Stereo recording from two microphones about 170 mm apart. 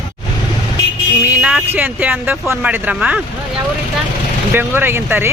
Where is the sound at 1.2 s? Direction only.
10° right (ahead or behind).